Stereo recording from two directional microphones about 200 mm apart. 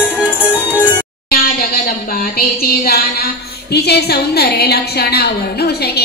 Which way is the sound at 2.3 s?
50° left (ahead or behind).